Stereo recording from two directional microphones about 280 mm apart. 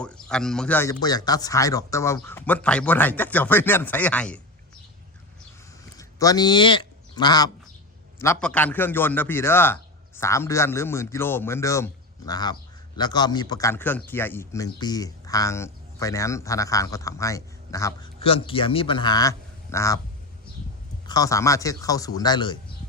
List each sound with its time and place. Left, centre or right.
0.0 s speech: centre
6.0 s speech: centre
21.1 s speech: centre